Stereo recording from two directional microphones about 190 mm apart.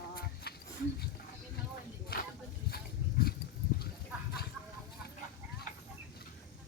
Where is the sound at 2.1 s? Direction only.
55° left (ahead or behind).